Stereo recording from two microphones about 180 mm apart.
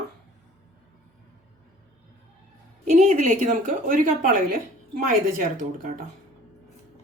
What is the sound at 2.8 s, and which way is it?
Speech, 35° right (ahead or behind).